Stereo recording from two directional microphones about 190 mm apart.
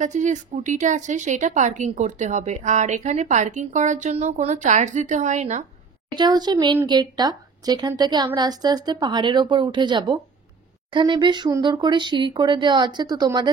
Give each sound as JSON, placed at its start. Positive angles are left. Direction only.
{"t": 0.0, "sound": "a woman's voice", "side_deg": -40}
{"t": 6.1, "sound": "speech", "side_deg": -20}